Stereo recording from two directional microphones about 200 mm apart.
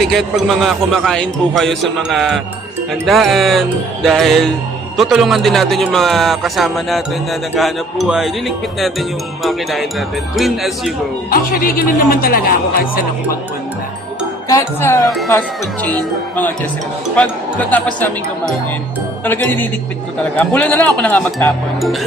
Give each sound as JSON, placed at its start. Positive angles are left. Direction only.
{"t": 0.0, "sound": "a man's voice", "side_deg": 0}
{"t": 11.3, "sound": "speech", "side_deg": 45}
{"t": 14.4, "sound": "speech", "side_deg": 15}
{"t": 17.7, "sound": "speech", "side_deg": 10}